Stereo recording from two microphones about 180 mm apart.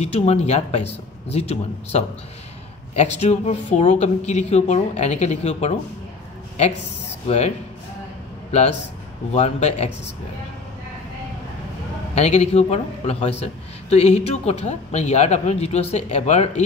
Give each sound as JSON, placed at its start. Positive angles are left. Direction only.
{"t": 0.0, "sound": "a man's voice", "side_deg": 35}
{"t": 7.2, "sound": "a man's voice", "side_deg": 35}
{"t": 12.2, "sound": "a man's voice", "side_deg": 35}